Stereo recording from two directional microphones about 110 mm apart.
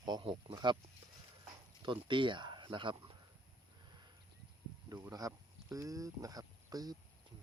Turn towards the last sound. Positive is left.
turn(degrees=-35)  # may be behind; listen again after turning